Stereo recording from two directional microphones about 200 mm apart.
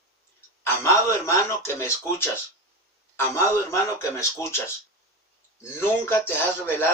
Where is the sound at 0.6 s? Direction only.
15° left (ahead or behind).